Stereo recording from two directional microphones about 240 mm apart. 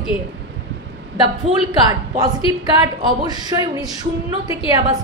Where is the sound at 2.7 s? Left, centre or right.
Centre.